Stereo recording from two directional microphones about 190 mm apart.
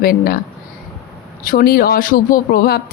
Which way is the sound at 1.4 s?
50° left (ahead or behind).